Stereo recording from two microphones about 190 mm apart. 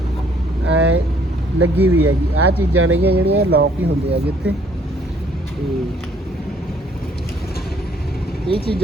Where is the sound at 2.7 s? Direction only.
90° right.